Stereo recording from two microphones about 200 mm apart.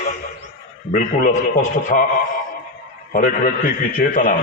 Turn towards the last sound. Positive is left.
turn(degrees=40)  # may be behind; listen again after turning